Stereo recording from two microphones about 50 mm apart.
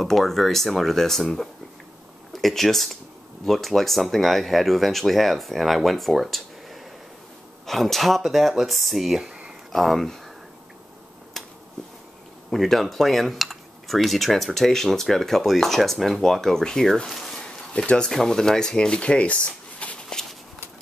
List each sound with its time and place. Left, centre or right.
0.0 s cutlery: centre
9.7 s speech: centre
11.4 s a sound: centre
12.4 s cutlery: centre
17.4 s speech: centre
20.1 s walk: centre